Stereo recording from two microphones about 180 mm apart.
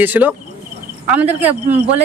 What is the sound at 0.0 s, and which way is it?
A woman's voice, 10° right (ahead or behind).